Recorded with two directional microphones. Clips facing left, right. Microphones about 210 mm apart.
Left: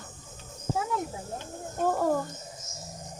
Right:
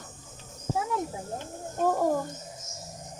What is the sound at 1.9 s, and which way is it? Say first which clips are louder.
Speech: even; 10° right (ahead or behind).